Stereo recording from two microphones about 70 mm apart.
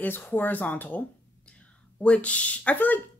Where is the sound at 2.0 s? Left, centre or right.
Centre.